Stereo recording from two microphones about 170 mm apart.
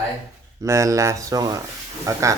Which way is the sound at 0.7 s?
15° right (ahead or behind).